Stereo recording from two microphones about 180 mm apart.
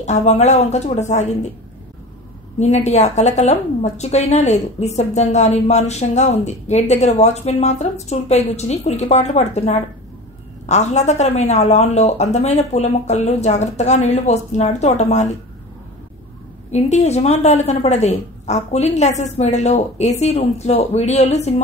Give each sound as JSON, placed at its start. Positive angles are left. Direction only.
{"t": 0.0, "sound": "a woman's voice", "side_deg": 40}
{"t": 2.6, "sound": "a woman's voice", "side_deg": 40}
{"t": 16.7, "sound": "a woman's voice", "side_deg": 40}